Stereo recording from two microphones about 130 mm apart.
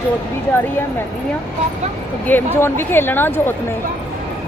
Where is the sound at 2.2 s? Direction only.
15° left (ahead or behind).